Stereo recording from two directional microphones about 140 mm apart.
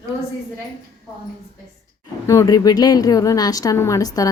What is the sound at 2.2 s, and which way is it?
Speech, 25° left (ahead or behind).